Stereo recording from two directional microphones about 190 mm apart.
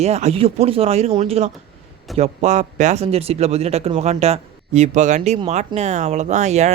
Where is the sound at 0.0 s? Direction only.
35° right (ahead or behind).